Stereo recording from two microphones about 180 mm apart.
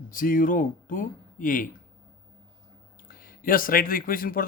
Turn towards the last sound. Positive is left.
turn(degrees=55)  # may be behind; listen again after turning